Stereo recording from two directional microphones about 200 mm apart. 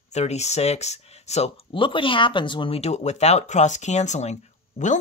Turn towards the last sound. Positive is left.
turn(degrees=35)  # may be behind; listen again after turning